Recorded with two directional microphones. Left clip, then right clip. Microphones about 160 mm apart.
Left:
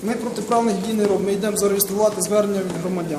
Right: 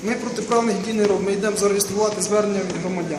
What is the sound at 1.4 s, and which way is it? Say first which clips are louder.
Speech: right 1 dB; 65° left (ahead or behind).